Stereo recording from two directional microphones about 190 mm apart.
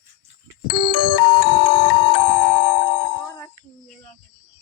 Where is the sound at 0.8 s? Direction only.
25° left (ahead or behind).